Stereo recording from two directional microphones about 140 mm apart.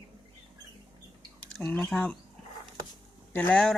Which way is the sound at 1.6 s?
5° left (ahead or behind).